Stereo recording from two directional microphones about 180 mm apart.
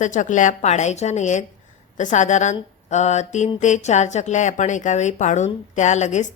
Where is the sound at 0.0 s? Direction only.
45° left (ahead or behind).